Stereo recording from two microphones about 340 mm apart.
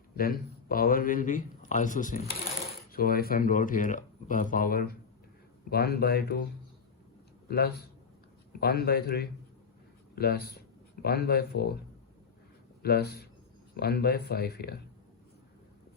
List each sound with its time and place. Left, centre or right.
0.2 s speech: left
7.4 s a man's voice: left
12.8 s speech: left